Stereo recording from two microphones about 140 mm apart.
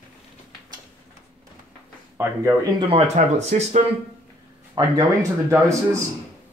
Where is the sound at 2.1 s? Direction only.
15° right (ahead or behind).